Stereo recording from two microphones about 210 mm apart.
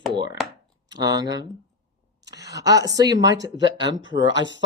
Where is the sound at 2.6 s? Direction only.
15° right (ahead or behind).